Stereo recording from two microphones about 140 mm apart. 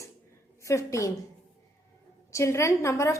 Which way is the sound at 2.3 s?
20° left (ahead or behind).